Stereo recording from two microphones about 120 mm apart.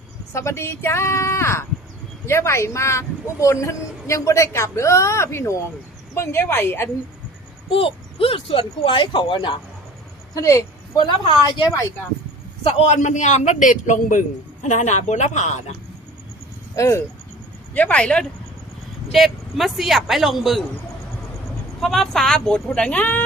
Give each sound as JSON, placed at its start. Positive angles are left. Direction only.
{"t": 0.3, "sound": "a man's voice", "side_deg": 25}
{"t": 7.7, "sound": "speech", "side_deg": 50}
{"t": 10.3, "sound": "a man's voice", "side_deg": 25}
{"t": 10.9, "sound": "a woman's voice", "side_deg": 40}
{"t": 12.6, "sound": "a man's voice", "side_deg": 60}
{"t": 16.7, "sound": "speech", "side_deg": 25}
{"t": 17.7, "sound": "speech", "side_deg": 10}
{"t": 21.8, "sound": "speech", "side_deg": 0}